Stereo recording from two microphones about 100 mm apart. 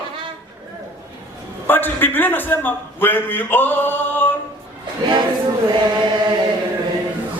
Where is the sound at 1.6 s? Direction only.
20° left (ahead or behind).